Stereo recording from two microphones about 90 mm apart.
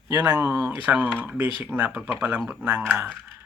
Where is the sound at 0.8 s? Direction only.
15° right (ahead or behind).